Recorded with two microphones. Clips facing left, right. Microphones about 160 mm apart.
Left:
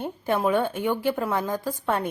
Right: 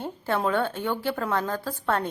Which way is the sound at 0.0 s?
10° left (ahead or behind).